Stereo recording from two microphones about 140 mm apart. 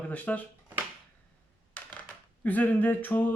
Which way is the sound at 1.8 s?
10° left (ahead or behind).